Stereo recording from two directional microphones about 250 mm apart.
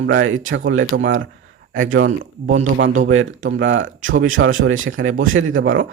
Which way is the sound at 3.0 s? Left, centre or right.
Right.